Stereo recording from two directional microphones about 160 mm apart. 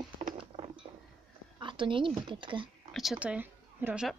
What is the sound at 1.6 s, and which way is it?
A woman's voice, 30° right (ahead or behind).